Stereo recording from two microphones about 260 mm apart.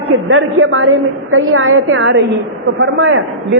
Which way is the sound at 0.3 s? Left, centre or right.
Right.